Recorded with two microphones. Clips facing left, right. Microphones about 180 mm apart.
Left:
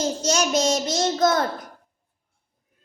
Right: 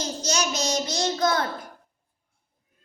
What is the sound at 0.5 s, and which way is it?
Child singing, 50° left (ahead or behind).